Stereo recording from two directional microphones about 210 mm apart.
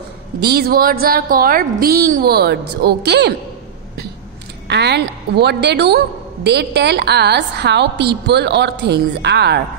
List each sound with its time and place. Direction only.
0.4 s a woman's voice: 50° right (ahead or behind)
4.6 s a woman's voice: 55° right (ahead or behind)